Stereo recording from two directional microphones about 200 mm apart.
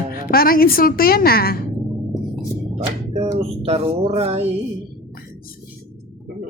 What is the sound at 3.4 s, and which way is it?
A woman's voice, 30° right (ahead or behind).